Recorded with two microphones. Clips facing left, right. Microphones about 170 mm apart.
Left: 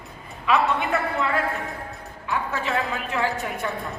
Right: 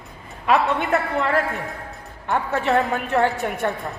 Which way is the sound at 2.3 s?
55° right (ahead or behind).